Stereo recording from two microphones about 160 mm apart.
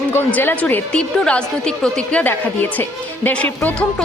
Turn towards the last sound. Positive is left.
turn(degrees=5)  # may be behind; listen again after turning